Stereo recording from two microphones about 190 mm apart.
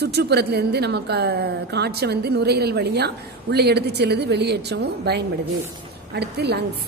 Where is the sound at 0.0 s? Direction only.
60° right (ahead or behind).